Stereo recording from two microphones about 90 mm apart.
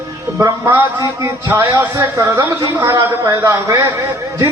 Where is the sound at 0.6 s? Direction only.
25° right (ahead or behind).